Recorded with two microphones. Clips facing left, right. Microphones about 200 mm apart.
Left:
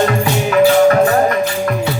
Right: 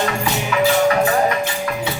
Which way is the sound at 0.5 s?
45° left (ahead or behind).